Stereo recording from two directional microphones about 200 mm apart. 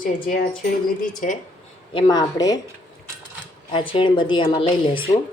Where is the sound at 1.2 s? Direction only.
40° left (ahead or behind).